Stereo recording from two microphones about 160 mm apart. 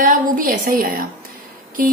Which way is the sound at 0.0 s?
55° right (ahead or behind).